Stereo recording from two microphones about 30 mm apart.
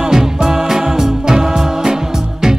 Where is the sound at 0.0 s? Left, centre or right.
Centre.